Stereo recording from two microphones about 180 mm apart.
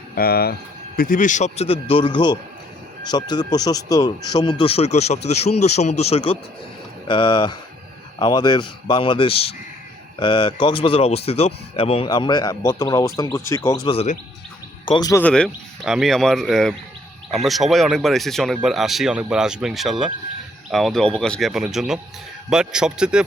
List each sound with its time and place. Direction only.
0.2 s speech: 60° left (ahead or behind); by 13.6 s 15° left (ahead or behind)
13.8 s speech: 35° left (ahead or behind)
14.8 s speech: 25° left (ahead or behind)
15.2 s speech: 5° left (ahead or behind)